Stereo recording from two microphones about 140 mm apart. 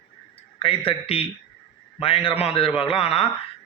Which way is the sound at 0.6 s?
40° left (ahead or behind).